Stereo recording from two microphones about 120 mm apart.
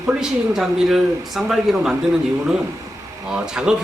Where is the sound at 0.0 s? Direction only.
5° right (ahead or behind).